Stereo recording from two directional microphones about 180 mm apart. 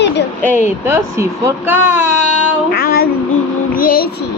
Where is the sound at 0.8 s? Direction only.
15° right (ahead or behind).